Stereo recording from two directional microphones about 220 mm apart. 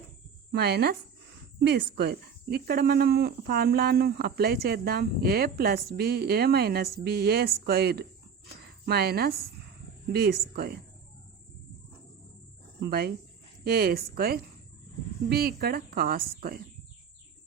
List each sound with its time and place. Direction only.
0.5 s speech: 45° right (ahead or behind)
12.8 s speech: 45° right (ahead or behind)